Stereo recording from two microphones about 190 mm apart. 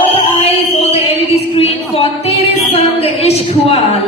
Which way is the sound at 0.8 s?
30° left (ahead or behind).